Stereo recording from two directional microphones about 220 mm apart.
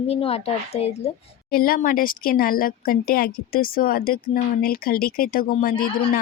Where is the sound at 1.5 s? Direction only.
40° left (ahead or behind).